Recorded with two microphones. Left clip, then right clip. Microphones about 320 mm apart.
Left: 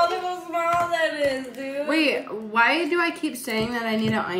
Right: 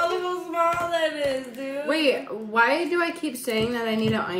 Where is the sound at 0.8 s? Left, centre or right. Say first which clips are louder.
Left 1 dB; left.